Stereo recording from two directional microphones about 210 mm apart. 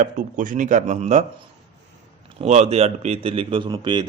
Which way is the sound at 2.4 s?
30° right (ahead or behind).